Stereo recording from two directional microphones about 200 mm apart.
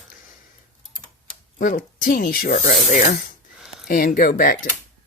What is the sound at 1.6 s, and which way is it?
Speech, 45° left (ahead or behind).